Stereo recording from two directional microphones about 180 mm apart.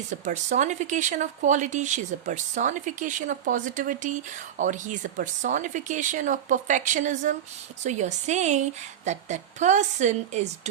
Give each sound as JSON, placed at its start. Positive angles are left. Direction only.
{"t": 0.1, "sound": "a woman's voice", "side_deg": -40}